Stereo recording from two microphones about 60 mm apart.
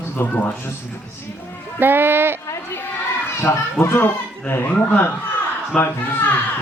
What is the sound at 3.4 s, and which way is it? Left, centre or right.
A child's voice, left.